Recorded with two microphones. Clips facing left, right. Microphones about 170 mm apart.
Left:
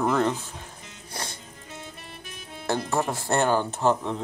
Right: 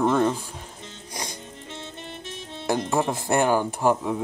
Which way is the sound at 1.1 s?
15° right (ahead or behind).